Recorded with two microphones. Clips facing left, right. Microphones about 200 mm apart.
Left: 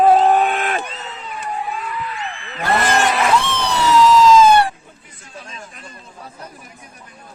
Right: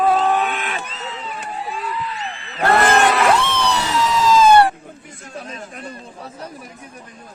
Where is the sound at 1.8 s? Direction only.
35° right (ahead or behind).